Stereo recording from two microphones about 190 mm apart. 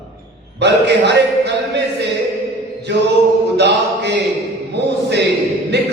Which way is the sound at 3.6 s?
65° right (ahead or behind).